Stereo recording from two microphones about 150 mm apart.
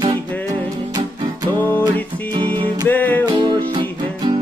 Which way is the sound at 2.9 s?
10° left (ahead or behind).